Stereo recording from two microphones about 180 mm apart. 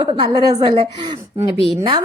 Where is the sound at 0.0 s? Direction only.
25° right (ahead or behind).